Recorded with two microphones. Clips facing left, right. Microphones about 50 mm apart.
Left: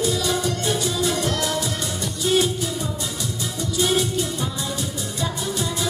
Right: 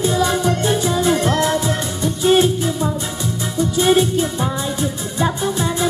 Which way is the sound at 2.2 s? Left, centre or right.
Right.